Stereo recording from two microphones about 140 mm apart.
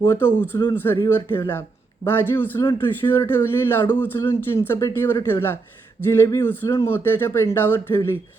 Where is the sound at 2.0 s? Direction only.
15° left (ahead or behind).